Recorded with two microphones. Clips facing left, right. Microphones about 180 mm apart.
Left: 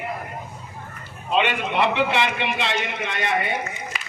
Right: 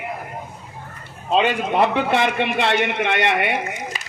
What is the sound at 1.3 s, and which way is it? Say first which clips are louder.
A man's voice: right 3 dB; 35° right (ahead or behind).